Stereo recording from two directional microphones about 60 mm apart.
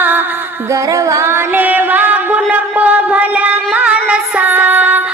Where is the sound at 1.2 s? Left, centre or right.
Right.